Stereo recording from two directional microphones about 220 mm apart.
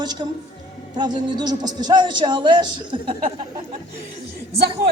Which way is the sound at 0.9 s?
20° right (ahead or behind).